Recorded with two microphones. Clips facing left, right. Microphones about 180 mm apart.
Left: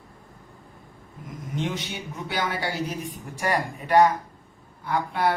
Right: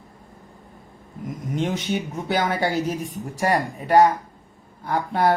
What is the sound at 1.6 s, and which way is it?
A woman's voice, 45° right (ahead or behind).